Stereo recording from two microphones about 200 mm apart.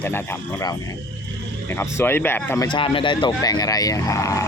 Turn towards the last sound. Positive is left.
turn(degrees=15)  # may be behind; listen again after turning